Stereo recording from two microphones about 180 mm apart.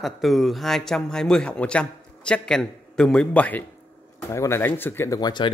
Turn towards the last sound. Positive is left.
turn(degrees=25)  # may be behind; listen again after turning